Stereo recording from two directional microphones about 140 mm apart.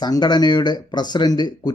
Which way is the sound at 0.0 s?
30° left (ahead or behind).